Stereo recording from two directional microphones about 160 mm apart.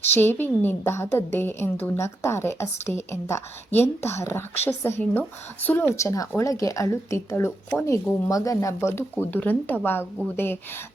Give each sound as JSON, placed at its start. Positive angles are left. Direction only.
{"t": 0.2, "sound": "speech", "side_deg": 15}